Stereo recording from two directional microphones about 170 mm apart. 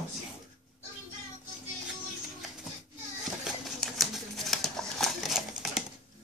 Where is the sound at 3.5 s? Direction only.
Centre (ahead or behind).